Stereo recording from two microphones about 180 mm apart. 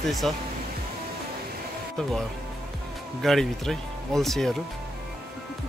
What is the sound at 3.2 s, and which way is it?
Speech, centre (ahead or behind).